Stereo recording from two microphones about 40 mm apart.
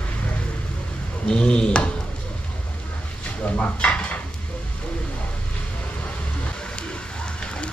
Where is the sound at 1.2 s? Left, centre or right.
Left.